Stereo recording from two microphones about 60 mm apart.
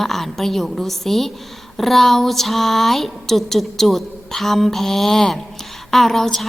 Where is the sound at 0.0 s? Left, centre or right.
Centre.